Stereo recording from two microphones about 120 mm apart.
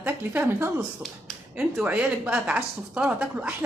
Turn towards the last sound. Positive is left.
turn(degrees=-10)  # may be behind; listen again after turning